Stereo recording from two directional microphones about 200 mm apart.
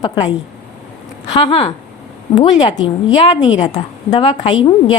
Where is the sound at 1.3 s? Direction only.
25° left (ahead or behind).